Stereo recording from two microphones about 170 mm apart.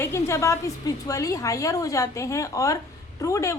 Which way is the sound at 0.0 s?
15° left (ahead or behind).